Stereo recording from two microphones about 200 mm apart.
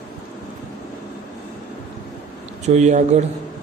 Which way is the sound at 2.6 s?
35° right (ahead or behind).